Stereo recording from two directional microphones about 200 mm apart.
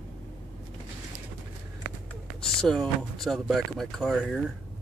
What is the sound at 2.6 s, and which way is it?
Speech, centre (ahead or behind).